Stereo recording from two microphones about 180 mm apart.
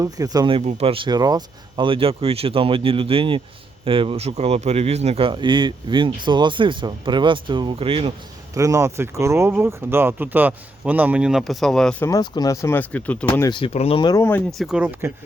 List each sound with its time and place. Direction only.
0.0 s speech: 20° right (ahead or behind)
8.5 s speech: 15° right (ahead or behind); by 12.0 s 5° left (ahead or behind)
12.0 s speech: 20° left (ahead or behind)
13.5 s speech: 30° left (ahead or behind); by 14.4 s 15° left (ahead or behind)
14.6 s speech: 5° right (ahead or behind)